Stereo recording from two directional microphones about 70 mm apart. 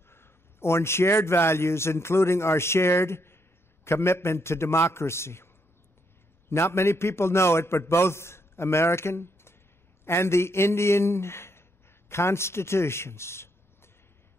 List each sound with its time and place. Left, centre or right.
0.1 s a man's voice: left
6.5 s a man's voice: left